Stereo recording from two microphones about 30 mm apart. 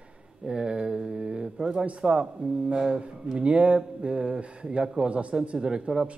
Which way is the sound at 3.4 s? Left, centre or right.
Right.